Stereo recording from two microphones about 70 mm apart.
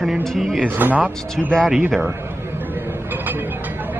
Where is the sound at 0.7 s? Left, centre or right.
Right.